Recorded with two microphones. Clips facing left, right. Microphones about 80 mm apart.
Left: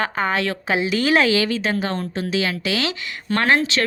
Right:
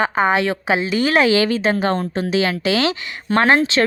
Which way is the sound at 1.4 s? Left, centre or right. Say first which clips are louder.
Right 4 dB; right.